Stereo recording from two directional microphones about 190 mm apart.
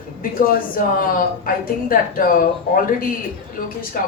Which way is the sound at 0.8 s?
45° left (ahead or behind).